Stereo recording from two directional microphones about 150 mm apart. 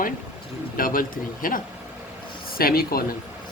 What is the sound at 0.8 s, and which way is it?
Speech, 65° left (ahead or behind).